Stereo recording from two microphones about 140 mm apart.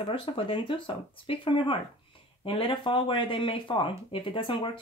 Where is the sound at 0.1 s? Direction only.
40° left (ahead or behind).